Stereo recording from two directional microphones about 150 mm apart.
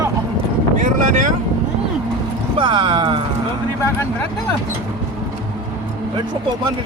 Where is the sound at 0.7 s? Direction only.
60° right (ahead or behind).